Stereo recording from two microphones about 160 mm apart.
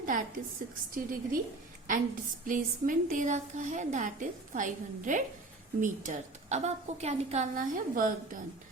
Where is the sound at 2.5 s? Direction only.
55° right (ahead or behind).